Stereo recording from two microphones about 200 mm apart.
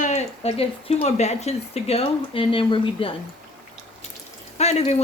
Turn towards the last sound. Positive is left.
turn(degrees=35)  # may be behind; listen again after turning